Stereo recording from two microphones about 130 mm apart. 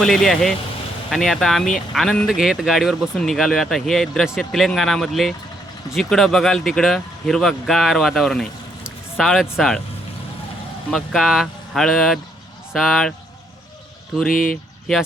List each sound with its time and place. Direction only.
0.0 s speech: 5° left (ahead or behind)
10.9 s speech: centre (ahead or behind)
14.3 s speech: 90° left